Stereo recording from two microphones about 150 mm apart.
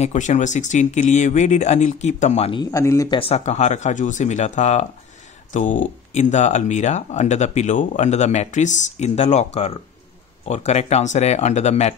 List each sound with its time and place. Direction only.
0.0 s speech: 55° left (ahead or behind)
2.6 s speech: 20° left (ahead or behind)
3.1 s speech: 40° left (ahead or behind)